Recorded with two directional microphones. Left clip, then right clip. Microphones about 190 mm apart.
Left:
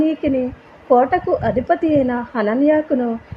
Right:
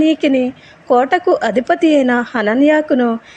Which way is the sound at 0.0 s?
15° right (ahead or behind).